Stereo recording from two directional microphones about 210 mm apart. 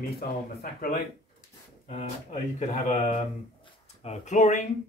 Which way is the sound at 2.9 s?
35° left (ahead or behind).